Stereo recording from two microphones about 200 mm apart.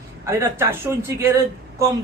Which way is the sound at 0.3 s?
15° right (ahead or behind).